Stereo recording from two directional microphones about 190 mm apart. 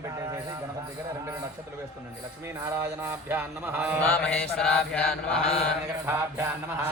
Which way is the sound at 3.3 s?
10° right (ahead or behind).